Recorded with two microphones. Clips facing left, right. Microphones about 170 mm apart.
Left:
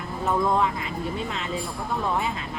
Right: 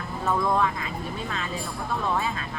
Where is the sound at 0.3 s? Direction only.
20° left (ahead or behind).